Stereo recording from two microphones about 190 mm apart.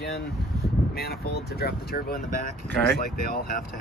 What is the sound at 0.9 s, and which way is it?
Speech, 55° left (ahead or behind).